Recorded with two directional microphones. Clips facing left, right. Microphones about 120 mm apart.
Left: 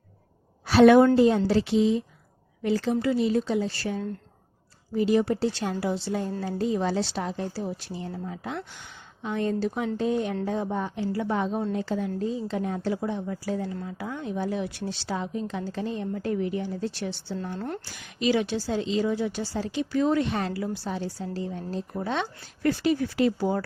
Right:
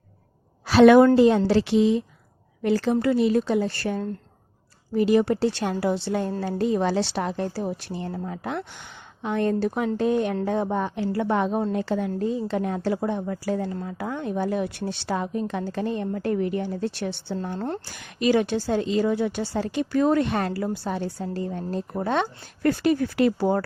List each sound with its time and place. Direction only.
0.6 s a sound: 90° right
1.1 s a woman's voice: 80° right; by 4.0 s 55° right (ahead or behind)
4.9 s a woman's voice: 65° right (ahead or behind)
17.4 s a woman's voice: 45° right (ahead or behind)
20.5 s a woman's voice: 35° right (ahead or behind)
20.7 s a woman's voice: 55° right (ahead or behind)